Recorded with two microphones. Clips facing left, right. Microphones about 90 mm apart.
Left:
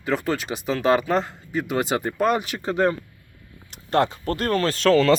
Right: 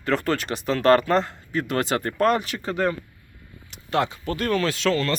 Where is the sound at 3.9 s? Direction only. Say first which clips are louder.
Left 3 dB; 45° left (ahead or behind).